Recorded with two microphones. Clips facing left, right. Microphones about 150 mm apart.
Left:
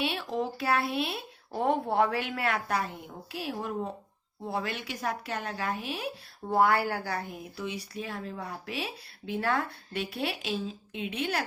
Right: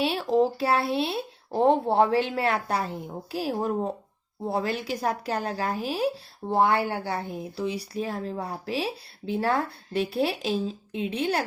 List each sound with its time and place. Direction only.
0.0 s a woman's voice: 35° right (ahead or behind)
6.5 s a woman's voice: 25° right (ahead or behind)